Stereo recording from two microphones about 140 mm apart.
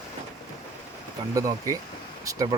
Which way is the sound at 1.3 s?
25° right (ahead or behind).